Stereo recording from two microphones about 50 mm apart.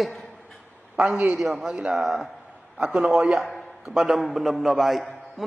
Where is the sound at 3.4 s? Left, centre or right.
Centre.